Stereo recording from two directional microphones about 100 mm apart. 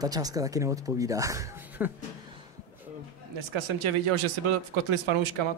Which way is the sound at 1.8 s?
20° right (ahead or behind).